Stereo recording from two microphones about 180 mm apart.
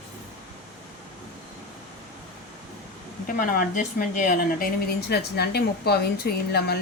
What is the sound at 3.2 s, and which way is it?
Speech, 50° left (ahead or behind).